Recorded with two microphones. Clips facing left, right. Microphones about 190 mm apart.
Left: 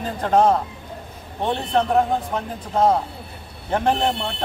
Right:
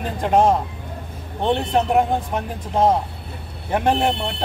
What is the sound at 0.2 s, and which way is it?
Speech, 15° right (ahead or behind).